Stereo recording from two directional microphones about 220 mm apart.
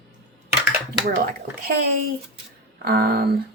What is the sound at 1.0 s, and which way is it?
Speech, 40° right (ahead or behind).